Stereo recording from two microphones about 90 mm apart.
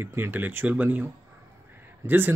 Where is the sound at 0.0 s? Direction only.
25° right (ahead or behind).